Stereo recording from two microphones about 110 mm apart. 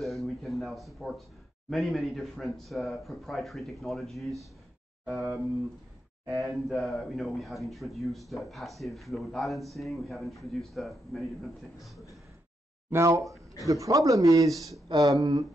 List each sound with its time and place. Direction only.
0.0 s speech: centre (ahead or behind)
5.0 s speech: 10° right (ahead or behind)
6.7 s speech: centre (ahead or behind)
12.9 s speech: 30° right (ahead or behind)